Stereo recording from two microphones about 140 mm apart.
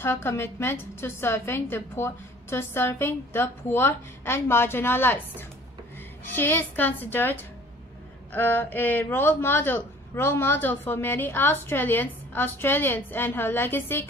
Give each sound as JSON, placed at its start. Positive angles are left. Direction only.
{"t": 0.0, "sound": "a man's voice", "side_deg": 15}
{"t": 6.3, "sound": "a man's voice", "side_deg": 15}